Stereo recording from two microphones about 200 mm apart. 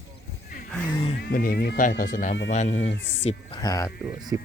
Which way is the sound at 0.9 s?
25° left (ahead or behind).